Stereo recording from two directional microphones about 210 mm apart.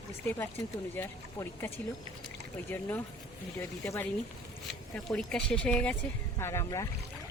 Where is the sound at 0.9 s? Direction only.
10° left (ahead or behind).